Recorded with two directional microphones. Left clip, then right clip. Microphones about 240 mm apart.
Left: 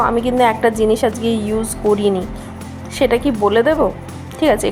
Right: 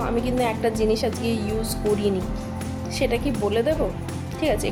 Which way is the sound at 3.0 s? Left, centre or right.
Centre.